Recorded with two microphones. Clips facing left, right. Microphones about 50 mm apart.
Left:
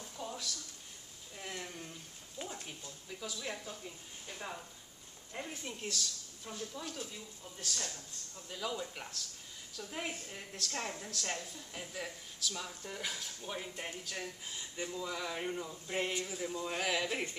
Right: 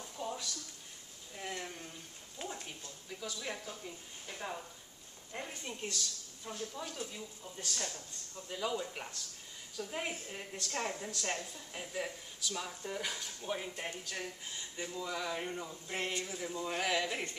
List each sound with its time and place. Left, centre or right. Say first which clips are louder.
0.2 s a sound: right 2 dB; centre
2.8 s a woman's voice: even; centre
10.1 s a woman's voice: right 2 dB; centre
10.5 s a woman's voice: right 2 dB; centre